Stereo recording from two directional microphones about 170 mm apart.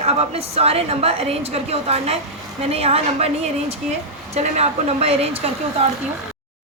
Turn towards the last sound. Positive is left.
turn(degrees=-35)  # may be behind; listen again after turning